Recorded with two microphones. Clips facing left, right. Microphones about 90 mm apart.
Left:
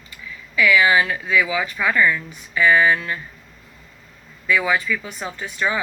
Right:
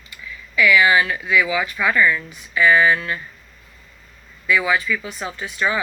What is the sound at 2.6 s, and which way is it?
Speech, 30° right (ahead or behind).